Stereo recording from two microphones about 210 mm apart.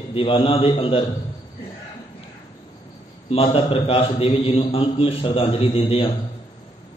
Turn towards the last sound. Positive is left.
turn(degrees=25)  # may be behind; listen again after turning